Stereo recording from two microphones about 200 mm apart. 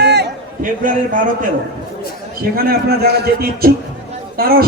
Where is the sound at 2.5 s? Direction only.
50° right (ahead or behind).